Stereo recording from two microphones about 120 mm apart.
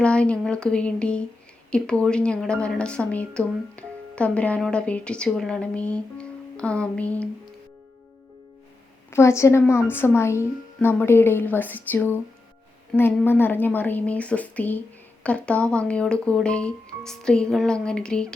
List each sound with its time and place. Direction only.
0.0 s a woman's voice: 10° left (ahead or behind)
9.0 s a woman's voice: 20° left (ahead or behind)
13.2 s a woman's voice: 15° left (ahead or behind)